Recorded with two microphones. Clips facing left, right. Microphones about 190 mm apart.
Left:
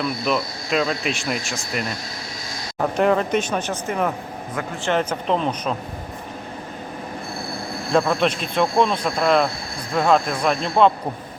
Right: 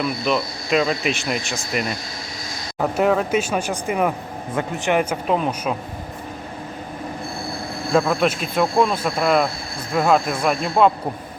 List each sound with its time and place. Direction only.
0.0 s speech: centre (ahead or behind)
2.8 s speech: 5° right (ahead or behind)
7.9 s speech: 5° right (ahead or behind)